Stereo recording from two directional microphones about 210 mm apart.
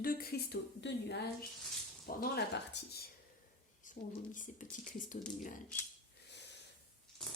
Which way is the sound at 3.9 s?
40° left (ahead or behind).